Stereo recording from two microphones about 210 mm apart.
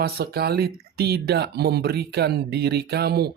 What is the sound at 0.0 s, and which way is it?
Speech, 50° right (ahead or behind).